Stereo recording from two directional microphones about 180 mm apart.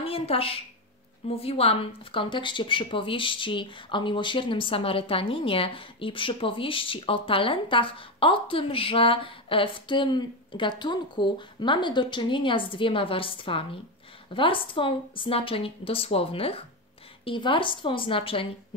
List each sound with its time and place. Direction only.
0.0 s a woman's voice: 30° left (ahead or behind)